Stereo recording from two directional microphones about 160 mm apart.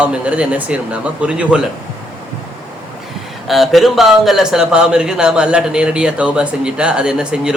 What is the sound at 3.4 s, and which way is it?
Speech, centre (ahead or behind).